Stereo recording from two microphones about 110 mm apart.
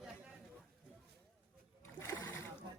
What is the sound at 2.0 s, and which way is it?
Splash, 25° left (ahead or behind).